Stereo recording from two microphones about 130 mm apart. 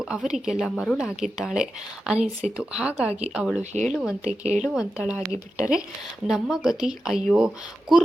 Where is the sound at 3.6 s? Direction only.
65° right (ahead or behind).